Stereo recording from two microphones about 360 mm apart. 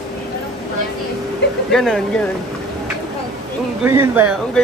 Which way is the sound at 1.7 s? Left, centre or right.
Centre.